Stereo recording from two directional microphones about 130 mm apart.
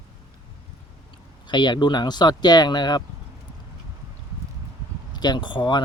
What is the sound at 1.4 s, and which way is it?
Speech, 35° left (ahead or behind).